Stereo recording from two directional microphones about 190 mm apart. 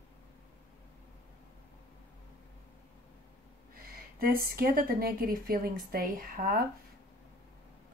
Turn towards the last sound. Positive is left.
turn(degrees=-50)  # may be behind; listen again after turning